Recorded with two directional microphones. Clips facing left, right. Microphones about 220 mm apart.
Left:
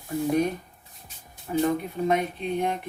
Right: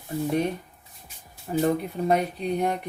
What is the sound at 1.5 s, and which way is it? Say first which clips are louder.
Speech: right 1 dB; 30° right (ahead or behind).